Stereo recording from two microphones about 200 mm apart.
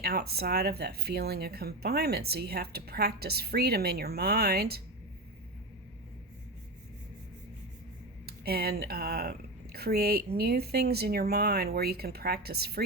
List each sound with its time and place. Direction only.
0.0 s speech: 50° right (ahead or behind)
8.3 s speech: 50° right (ahead or behind)